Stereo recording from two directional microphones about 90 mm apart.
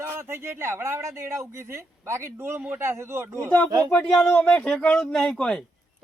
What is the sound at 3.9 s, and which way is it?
Speech, 10° left (ahead or behind).